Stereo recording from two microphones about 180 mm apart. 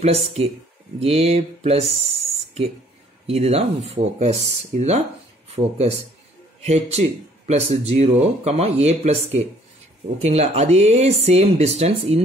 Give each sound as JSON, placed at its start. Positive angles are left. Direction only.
{"t": 1.0, "sound": "speech", "side_deg": -35}